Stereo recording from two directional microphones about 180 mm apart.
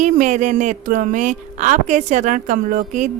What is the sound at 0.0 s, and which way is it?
Speech, 40° right (ahead or behind).